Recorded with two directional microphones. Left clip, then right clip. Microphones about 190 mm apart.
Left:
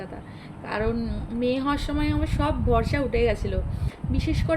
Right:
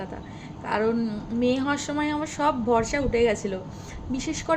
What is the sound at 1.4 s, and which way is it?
A woman's voice, 10° right (ahead or behind).